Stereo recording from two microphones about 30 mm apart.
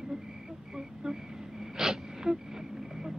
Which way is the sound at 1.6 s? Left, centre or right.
Centre.